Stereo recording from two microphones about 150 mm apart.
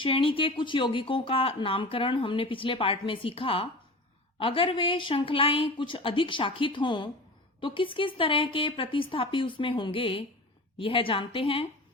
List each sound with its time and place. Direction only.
0.0 s speech: 35° left (ahead or behind)